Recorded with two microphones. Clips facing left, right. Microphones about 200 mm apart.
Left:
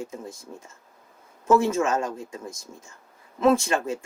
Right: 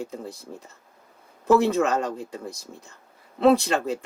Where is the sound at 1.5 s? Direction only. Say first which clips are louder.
Right 1 dB; 35° right (ahead or behind).